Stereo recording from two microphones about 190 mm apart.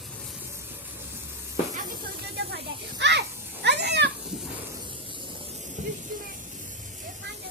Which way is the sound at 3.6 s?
65° right (ahead or behind).